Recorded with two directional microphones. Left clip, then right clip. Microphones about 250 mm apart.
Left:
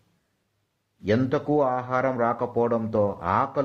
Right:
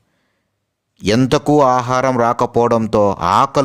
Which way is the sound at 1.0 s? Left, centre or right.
Right.